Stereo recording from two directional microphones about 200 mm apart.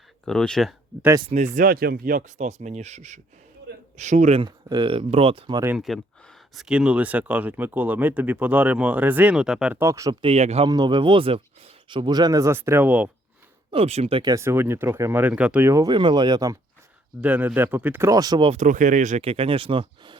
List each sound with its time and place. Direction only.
0.3 s speech: 5° left (ahead or behind)
1.5 s speech: 45° right (ahead or behind); by 5.6 s 25° right (ahead or behind)
5.6 s speech: centre (ahead or behind)
13.7 s speech: 30° right (ahead or behind)
17.2 s speech: 5° right (ahead or behind)
18.5 s speech: 40° right (ahead or behind)